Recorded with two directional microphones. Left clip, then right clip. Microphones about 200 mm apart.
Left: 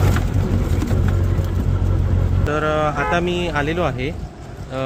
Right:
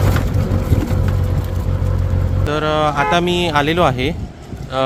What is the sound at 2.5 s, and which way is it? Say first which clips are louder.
A man's voice: right 3 dB; 20° right (ahead or behind).